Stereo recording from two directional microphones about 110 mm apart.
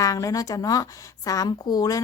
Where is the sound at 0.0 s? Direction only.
30° left (ahead or behind).